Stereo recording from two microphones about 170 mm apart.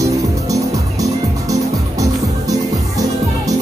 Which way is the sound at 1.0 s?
20° right (ahead or behind).